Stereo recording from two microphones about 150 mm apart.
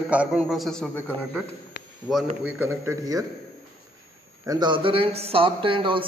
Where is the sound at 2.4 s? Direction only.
15° right (ahead or behind).